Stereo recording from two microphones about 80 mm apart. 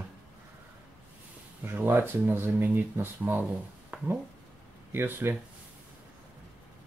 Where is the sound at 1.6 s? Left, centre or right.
Right.